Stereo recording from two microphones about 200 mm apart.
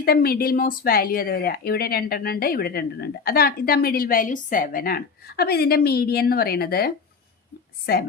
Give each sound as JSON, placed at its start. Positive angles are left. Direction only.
{"t": 0.0, "sound": "speech", "side_deg": 50}